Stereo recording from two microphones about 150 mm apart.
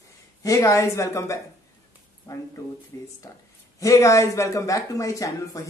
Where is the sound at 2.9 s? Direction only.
20° left (ahead or behind).